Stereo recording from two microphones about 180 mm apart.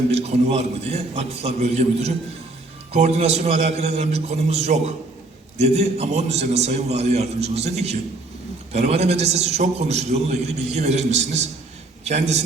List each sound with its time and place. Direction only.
0.1 s a man's voice: 35° right (ahead or behind)